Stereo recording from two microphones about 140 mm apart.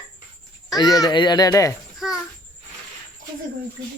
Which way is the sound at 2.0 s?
5° right (ahead or behind).